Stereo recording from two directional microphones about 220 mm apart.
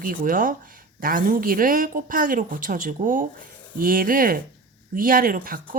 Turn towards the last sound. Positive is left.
turn(degrees=-40)  # may be behind; listen again after turning